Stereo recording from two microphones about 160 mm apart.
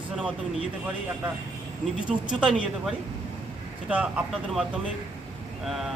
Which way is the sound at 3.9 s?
5° right (ahead or behind).